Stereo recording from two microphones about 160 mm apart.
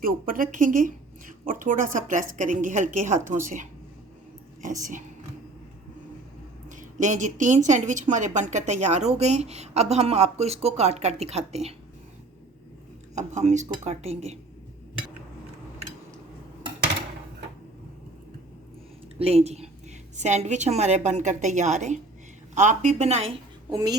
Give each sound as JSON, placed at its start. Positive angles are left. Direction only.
{"t": 0.0, "sound": "a woman's voice", "side_deg": -60}
{"t": 4.8, "sound": "a woman's voice", "side_deg": -55}
{"t": 6.7, "sound": "a woman's voice", "side_deg": -50}
{"t": 13.1, "sound": "a woman's voice", "side_deg": -45}
{"t": 19.2, "sound": "a woman's voice", "side_deg": -40}
{"t": 23.7, "sound": "a woman's voice", "side_deg": -25}